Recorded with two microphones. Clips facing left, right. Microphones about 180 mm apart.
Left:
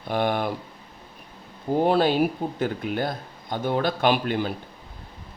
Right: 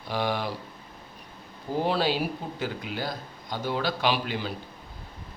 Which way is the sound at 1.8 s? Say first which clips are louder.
Left 6 dB; 50° left (ahead or behind).